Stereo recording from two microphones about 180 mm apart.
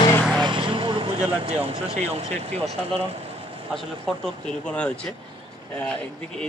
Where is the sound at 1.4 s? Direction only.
35° right (ahead or behind).